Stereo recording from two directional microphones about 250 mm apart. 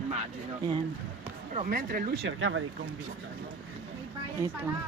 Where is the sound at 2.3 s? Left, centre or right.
Right.